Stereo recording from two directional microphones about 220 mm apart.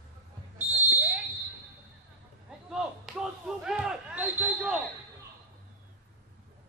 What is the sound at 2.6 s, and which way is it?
Basketball bounce, centre (ahead or behind).